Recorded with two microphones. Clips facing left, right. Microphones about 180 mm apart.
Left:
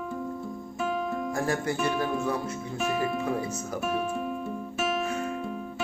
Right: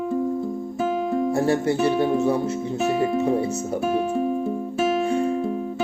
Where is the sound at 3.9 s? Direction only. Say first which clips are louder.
Right 7 dB; 30° right (ahead or behind).